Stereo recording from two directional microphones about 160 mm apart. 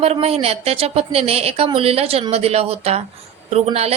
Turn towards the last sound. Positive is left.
turn(degrees=-40)  # may be behind; listen again after turning